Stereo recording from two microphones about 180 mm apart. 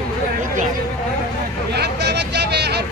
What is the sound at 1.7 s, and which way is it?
Vehicle, 65° right (ahead or behind).